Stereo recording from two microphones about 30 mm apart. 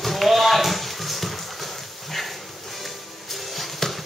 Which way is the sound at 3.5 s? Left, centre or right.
Centre.